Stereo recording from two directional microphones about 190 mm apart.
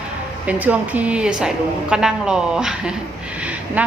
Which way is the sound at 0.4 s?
5° right (ahead or behind).